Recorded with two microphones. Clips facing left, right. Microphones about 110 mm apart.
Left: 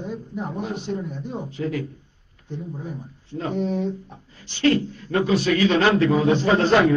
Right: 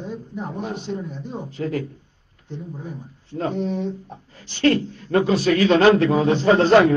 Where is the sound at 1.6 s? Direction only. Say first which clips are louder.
Right 2 dB; 35° right (ahead or behind).